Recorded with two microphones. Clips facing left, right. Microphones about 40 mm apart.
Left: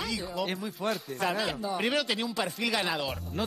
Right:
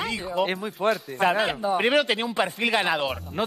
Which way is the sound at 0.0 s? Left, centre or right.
Right.